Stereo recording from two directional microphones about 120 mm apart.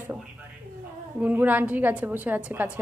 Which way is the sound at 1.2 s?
15° right (ahead or behind).